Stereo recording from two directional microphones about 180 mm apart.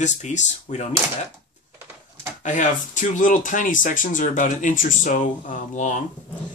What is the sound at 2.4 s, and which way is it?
Speech, 45° left (ahead or behind).